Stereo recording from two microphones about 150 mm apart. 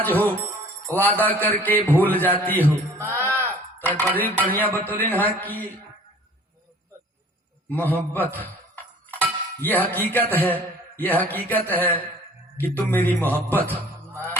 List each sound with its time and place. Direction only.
0.0 s a man's voice: 10° left (ahead or behind)
2.6 s mantra: 15° right (ahead or behind)
3.2 s a sound: 15° left (ahead or behind)
3.8 s a man's voice: 15° left (ahead or behind)
7.7 s a man's voice: 10° left (ahead or behind)
13.7 s music: 15° right (ahead or behind)